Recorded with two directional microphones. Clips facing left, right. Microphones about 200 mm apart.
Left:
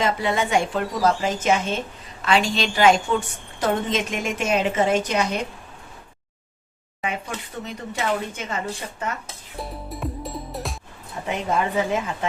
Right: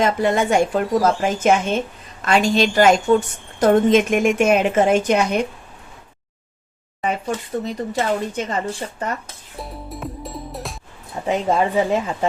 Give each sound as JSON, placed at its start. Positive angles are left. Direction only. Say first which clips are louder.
{"t": 0.0, "sound": "a woman's voice", "louder": "right 5 dB", "side_deg": -45}
{"t": 7.6, "sound": "speech", "louder": "right 5 dB", "side_deg": -35}
{"t": 9.6, "sound": "music", "louder": "even", "side_deg": 0}
{"t": 11.3, "sound": "speech", "louder": "right 5 dB", "side_deg": -35}